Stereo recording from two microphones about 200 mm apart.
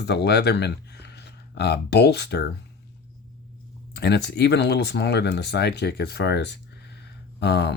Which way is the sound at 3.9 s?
55° left (ahead or behind).